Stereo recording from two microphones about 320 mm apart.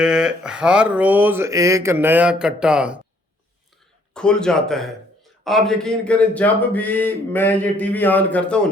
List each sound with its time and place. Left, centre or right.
0.0 s speech: centre
4.1 s speech: centre